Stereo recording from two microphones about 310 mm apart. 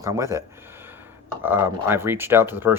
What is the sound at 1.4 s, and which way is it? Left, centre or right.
Speech, centre.